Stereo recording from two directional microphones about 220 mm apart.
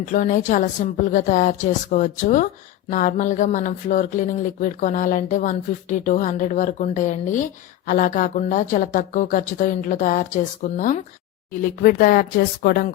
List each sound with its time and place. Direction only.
0.0 s speech: 35° left (ahead or behind)